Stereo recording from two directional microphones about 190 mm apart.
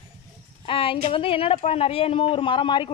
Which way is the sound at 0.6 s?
30° left (ahead or behind).